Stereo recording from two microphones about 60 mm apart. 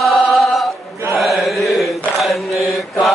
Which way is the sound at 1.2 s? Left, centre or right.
Centre.